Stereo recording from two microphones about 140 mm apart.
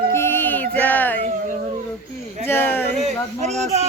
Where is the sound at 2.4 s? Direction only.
15° left (ahead or behind).